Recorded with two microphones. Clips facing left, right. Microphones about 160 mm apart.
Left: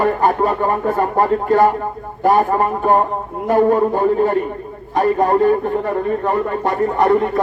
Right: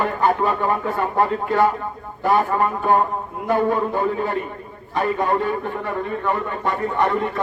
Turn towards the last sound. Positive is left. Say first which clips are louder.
# left 5 dB
turn(degrees=40)  # may be behind; listen again after turning